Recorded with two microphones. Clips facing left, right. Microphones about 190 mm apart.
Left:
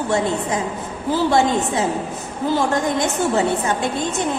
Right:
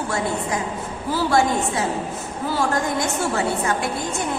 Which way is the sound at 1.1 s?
20° left (ahead or behind).